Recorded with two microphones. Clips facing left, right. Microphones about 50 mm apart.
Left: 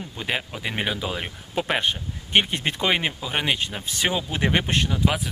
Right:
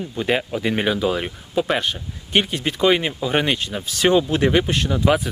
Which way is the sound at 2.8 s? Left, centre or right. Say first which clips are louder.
Right 6 dB; centre.